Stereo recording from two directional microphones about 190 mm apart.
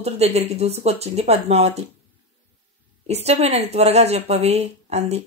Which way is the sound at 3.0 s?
35° right (ahead or behind).